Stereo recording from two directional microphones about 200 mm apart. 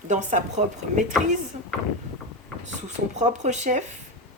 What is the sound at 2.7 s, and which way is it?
Speech, 35° right (ahead or behind).